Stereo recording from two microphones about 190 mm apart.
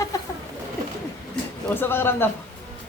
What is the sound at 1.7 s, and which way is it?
Speech, 10° left (ahead or behind).